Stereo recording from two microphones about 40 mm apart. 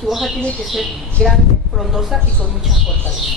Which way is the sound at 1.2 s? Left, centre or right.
Centre.